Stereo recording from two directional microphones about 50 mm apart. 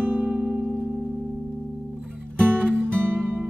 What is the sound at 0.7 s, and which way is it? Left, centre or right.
Music, left.